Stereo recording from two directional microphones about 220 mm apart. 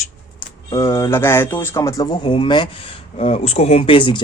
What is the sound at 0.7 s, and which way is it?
Speech, 15° left (ahead or behind).